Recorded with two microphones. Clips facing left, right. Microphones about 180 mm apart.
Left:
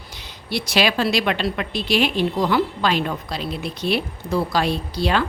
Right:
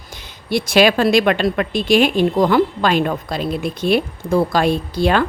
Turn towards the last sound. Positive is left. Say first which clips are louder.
# right 5 dB
turn(degrees=-50)  # may be behind; listen again after turning